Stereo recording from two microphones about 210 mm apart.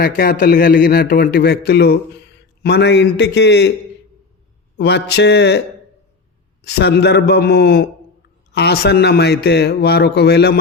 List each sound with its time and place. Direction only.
0.0 s a man's voice: 45° left (ahead or behind)
4.8 s a man's voice: 55° left (ahead or behind)
6.7 s a man's voice: 50° left (ahead or behind)